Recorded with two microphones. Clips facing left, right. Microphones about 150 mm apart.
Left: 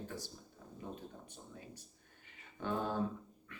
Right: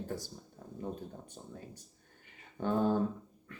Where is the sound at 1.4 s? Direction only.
30° right (ahead or behind).